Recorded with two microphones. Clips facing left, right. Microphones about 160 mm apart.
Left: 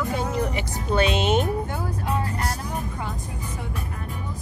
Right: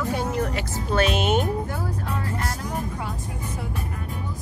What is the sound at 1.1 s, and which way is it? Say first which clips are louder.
Speech: left 1 dB; 10° right (ahead or behind).